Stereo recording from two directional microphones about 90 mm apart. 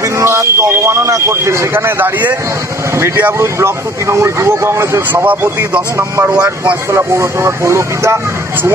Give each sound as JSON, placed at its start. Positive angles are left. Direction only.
{"t": 0.0, "sound": "a man's voice", "side_deg": -35}
{"t": 5.9, "sound": "a man's voice", "side_deg": -30}
{"t": 6.3, "sound": "speech", "side_deg": -15}
{"t": 6.9, "sound": "a man's voice", "side_deg": -30}